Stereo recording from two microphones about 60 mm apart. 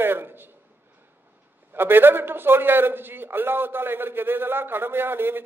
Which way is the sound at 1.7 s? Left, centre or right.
Right.